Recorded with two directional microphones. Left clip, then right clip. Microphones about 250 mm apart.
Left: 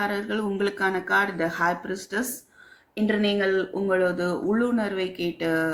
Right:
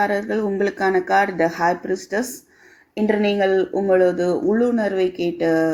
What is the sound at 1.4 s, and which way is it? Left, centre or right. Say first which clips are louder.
Speech: right 6 dB; left.